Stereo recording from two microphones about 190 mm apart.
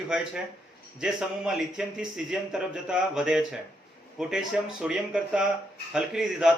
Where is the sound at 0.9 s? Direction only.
5° right (ahead or behind).